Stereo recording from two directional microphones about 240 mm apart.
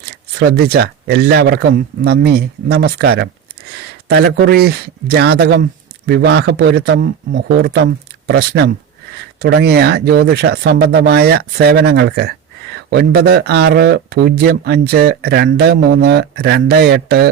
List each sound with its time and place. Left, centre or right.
0.3 s speech: right